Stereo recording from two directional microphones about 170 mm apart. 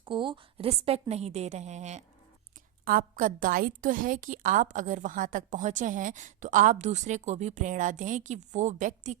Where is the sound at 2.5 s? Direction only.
55° right (ahead or behind).